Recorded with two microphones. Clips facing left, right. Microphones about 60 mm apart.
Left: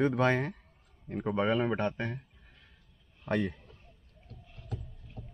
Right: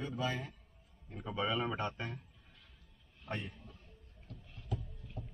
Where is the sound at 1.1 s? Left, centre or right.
Left.